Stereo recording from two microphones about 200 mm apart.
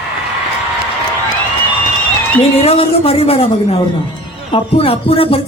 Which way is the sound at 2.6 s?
30° left (ahead or behind).